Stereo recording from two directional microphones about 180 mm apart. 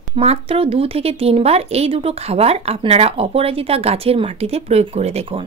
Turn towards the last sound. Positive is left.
turn(degrees=-35)  # may be behind; listen again after turning